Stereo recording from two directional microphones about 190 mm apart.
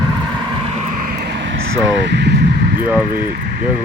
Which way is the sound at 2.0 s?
65° right (ahead or behind).